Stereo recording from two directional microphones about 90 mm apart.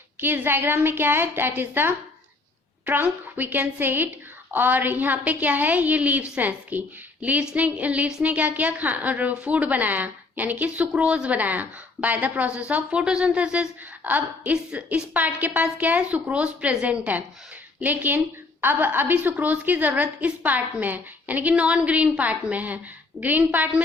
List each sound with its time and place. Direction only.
0.2 s a woman's voice: 25° right (ahead or behind)